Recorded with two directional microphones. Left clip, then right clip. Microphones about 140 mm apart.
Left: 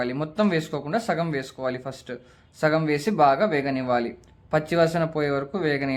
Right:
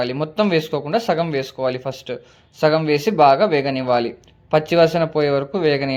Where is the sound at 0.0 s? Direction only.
20° right (ahead or behind).